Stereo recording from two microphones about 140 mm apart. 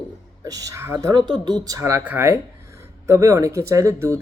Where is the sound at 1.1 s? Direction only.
30° right (ahead or behind).